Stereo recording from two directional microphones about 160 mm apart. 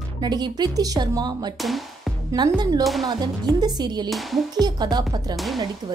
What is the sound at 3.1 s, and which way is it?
A woman's voice, 25° right (ahead or behind).